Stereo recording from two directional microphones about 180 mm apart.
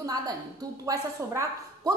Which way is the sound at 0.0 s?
20° right (ahead or behind).